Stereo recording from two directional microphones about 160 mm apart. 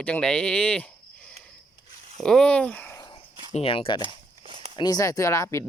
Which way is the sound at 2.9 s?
25° left (ahead or behind).